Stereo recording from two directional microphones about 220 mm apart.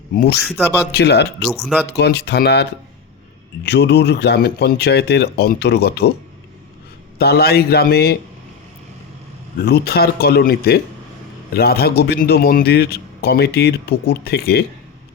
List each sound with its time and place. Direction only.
0.1 s speech: 40° left (ahead or behind)
0.3 s speech: centre (ahead or behind)
0.9 s a man's voice: 50° left (ahead or behind)
1.5 s speech: centre (ahead or behind)
1.9 s a man's voice: 45° left (ahead or behind)
7.2 s a man's voice: 45° left (ahead or behind)
9.6 s a man's voice: 45° left (ahead or behind)